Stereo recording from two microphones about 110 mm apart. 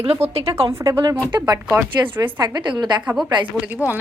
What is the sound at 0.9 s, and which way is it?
A woman's voice, 25° right (ahead or behind).